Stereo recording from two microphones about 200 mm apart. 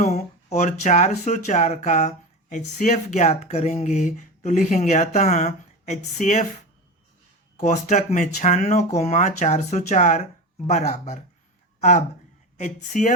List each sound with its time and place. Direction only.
0.0 s speech: 35° left (ahead or behind)
7.9 s speech: 40° left (ahead or behind)
12.5 s speech: 40° left (ahead or behind)